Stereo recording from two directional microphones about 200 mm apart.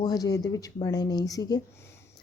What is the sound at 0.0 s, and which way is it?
A woman's voice, 20° left (ahead or behind).